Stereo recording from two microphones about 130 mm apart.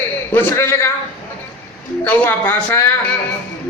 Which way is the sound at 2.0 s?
15° left (ahead or behind).